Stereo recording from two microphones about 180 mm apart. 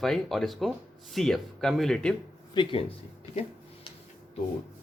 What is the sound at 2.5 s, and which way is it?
Speech, 25° left (ahead or behind).